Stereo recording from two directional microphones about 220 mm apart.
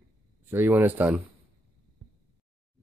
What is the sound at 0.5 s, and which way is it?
Speech, 15° right (ahead or behind).